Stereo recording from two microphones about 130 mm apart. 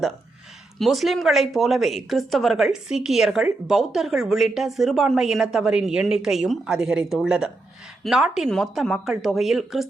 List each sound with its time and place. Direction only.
0.8 s speech: centre (ahead or behind)